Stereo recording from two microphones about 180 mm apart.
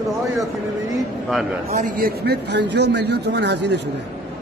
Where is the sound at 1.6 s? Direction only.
45° right (ahead or behind); by 3.8 s 70° right (ahead or behind).